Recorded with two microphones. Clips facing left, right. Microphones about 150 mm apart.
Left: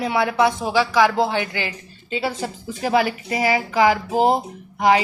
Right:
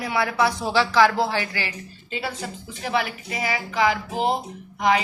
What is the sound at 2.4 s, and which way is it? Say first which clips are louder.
Speech: left 6 dB; 40° left (ahead or behind).